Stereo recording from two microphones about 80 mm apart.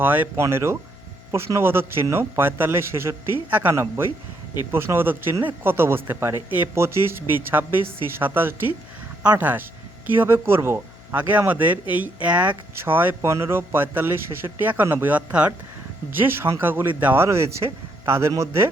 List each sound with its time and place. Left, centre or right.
0.0 s speech: right
16.0 s speech: right
17.2 s speech: right